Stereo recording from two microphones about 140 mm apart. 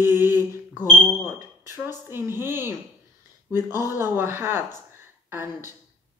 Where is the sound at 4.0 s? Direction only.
15° right (ahead or behind).